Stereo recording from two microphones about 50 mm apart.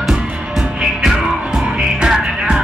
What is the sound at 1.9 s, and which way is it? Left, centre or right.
Music, centre.